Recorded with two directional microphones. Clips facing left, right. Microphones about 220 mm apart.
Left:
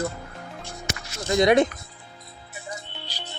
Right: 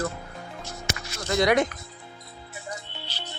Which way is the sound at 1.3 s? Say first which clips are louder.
Left 3 dB; 20° left (ahead or behind).